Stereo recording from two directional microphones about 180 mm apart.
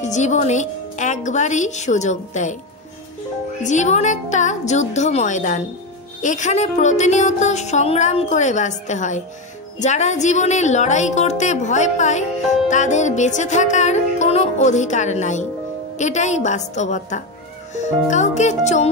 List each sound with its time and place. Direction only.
0.0 s a woman's voice: 40° left (ahead or behind)
3.6 s a woman's voice: 40° left (ahead or behind)